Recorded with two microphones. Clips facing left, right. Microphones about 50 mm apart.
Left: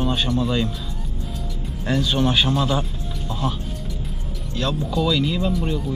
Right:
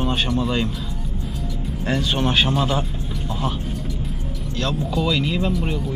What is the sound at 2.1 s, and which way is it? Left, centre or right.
Speech, right.